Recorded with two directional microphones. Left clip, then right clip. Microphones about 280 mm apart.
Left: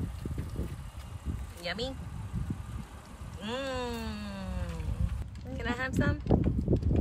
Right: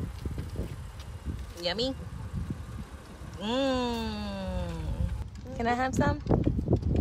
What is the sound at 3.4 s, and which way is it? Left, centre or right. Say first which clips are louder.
Speech: right 6 dB; centre.